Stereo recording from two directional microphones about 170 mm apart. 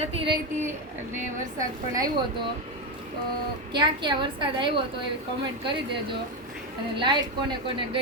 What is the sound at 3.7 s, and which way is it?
A woman's voice, 25° right (ahead or behind).